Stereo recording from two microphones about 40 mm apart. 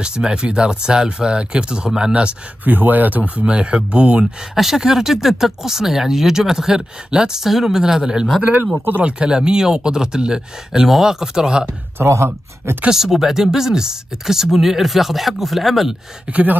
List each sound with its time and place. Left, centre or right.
0.0 s speech: right
2.6 s speech: right
3.4 s speech: right
4.4 s speech: centre
8.7 s speech: right
9.0 s speech: right
12.0 s speech: right
12.9 s speech: centre
16.3 s speech: right